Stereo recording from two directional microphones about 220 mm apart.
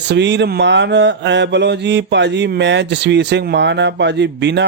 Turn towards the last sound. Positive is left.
turn(degrees=-50)  # may be behind; listen again after turning